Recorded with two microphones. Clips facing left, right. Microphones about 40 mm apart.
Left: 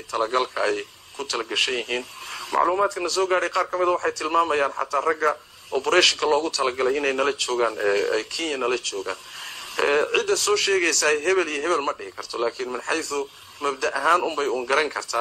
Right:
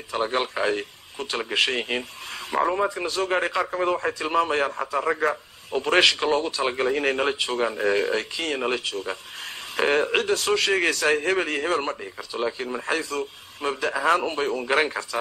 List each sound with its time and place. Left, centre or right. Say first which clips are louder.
0.1 s a man's voice: left 2 dB; right
2.6 s speech: left 2 dB; centre
3.2 s a man's voice: left 2 dB; centre
5.7 s a man's voice: even; right
12.3 s a man's voice: left 2 dB; right
12.6 s a man's voice: even; centre